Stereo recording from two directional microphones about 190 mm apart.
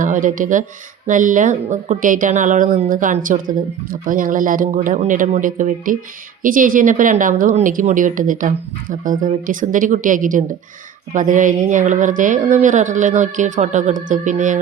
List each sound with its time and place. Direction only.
0.0 s a woman's voice: 45° right (ahead or behind)